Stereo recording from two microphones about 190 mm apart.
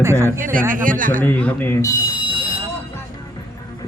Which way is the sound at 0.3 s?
45° right (ahead or behind).